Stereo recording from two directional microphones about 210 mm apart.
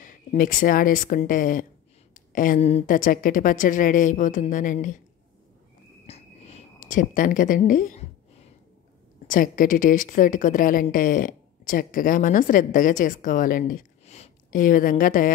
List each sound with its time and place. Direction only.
0.0 s a woman's voice: 40° left (ahead or behind)
6.0 s a sound: 30° left (ahead or behind)
9.3 s a woman's voice: 40° left (ahead or behind)